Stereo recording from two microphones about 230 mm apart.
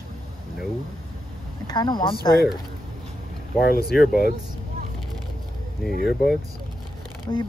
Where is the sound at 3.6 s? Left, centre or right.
Left.